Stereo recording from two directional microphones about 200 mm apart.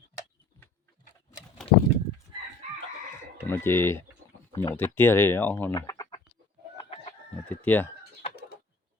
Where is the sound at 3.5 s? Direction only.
10° left (ahead or behind).